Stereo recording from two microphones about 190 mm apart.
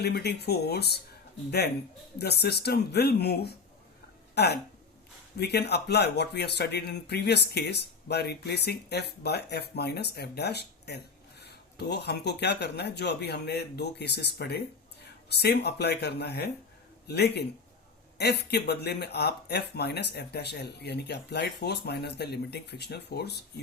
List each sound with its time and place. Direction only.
0.0 s speech: 60° left (ahead or behind)